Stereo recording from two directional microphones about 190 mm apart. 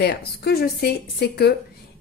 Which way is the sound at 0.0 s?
55° left (ahead or behind).